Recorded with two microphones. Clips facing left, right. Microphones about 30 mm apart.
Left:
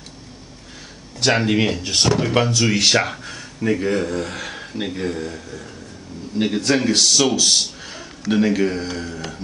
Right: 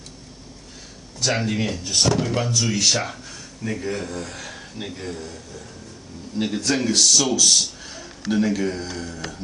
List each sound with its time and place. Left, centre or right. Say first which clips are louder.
1.3 s speech: left 6 dB; left
2.0 s speech: left 3 dB; left
2.6 s speech: left 5 dB; left